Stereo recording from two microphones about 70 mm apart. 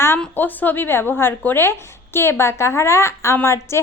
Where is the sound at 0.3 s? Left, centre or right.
Left.